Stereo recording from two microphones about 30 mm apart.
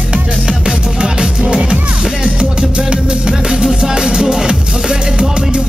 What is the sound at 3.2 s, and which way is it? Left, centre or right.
Music, right.